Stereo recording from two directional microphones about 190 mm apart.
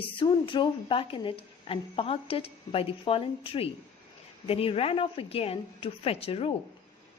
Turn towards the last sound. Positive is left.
turn(degrees=30)  # may be behind; listen again after turning